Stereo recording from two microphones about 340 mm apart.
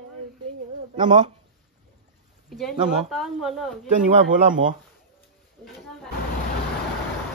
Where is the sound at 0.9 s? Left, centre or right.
Centre.